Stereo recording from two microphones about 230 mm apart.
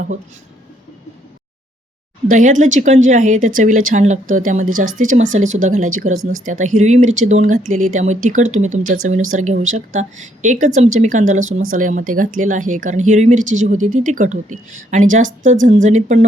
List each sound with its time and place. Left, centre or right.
2.3 s speech: right